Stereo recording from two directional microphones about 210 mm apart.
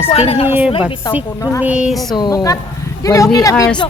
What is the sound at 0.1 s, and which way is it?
Speech, 30° left (ahead or behind).